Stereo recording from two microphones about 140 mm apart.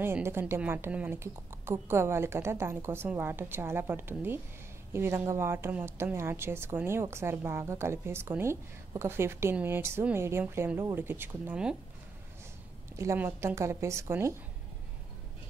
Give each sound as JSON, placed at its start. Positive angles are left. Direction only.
{"t": 0.0, "sound": "speech", "side_deg": -15}
{"t": 12.9, "sound": "speech", "side_deg": -20}